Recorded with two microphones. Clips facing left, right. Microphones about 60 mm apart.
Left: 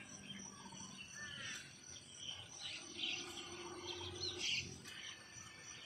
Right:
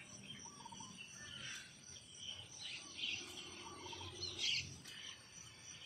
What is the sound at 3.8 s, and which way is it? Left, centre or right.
Wild animals, left.